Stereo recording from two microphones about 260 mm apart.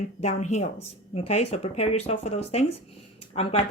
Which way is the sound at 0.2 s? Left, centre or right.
Left.